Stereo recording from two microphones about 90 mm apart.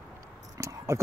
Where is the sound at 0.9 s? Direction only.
35° right (ahead or behind).